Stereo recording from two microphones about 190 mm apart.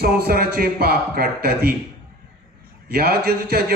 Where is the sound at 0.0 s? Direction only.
55° right (ahead or behind).